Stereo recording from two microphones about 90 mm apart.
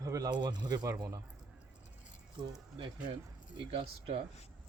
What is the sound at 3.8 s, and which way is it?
Speech, 90° right.